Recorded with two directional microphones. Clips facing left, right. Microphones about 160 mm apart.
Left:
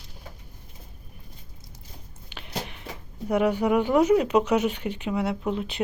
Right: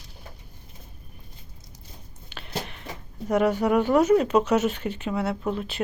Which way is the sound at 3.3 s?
10° left (ahead or behind).